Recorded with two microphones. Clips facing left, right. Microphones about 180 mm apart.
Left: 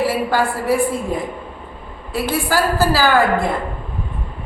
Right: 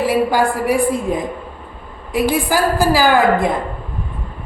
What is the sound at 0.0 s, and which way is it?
A man's voice, 15° right (ahead or behind).